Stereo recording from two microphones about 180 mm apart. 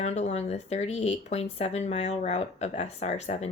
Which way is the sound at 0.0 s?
40° left (ahead or behind).